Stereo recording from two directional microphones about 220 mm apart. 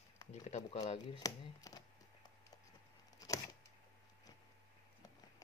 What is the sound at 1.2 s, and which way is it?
Speech, 15° left (ahead or behind).